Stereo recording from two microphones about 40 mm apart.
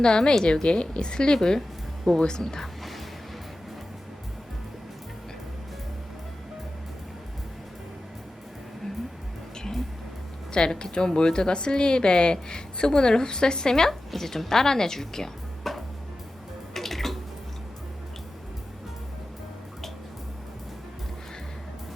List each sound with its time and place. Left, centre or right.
0.0 s a woman's voice: centre
10.5 s a woman's voice: left
14.1 s speech: centre
16.7 s a sound: centre